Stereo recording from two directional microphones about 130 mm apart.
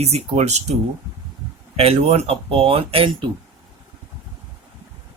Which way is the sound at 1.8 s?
55° right (ahead or behind).